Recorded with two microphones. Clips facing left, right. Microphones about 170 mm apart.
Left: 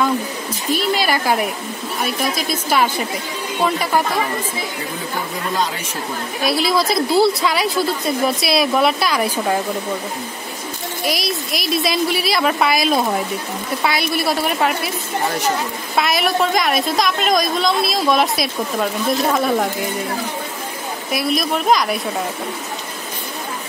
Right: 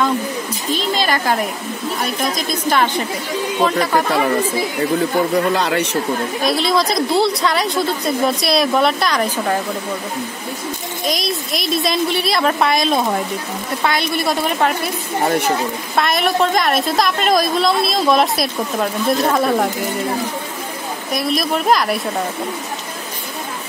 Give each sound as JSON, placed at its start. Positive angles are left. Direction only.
{"t": 0.7, "sound": "a sound", "side_deg": 10}
{"t": 2.0, "sound": "a woman's voice", "side_deg": 5}
{"t": 5.6, "sound": "speech", "side_deg": -70}
{"t": 6.4, "sound": "a woman's voice", "side_deg": 5}
{"t": 11.1, "sound": "a woman's voice", "side_deg": 0}
{"t": 16.0, "sound": "a woman's voice", "side_deg": 0}
{"t": 21.1, "sound": "a woman's voice", "side_deg": 0}